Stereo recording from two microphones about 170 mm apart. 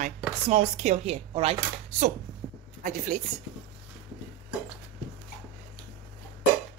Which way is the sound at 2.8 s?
50° right (ahead or behind).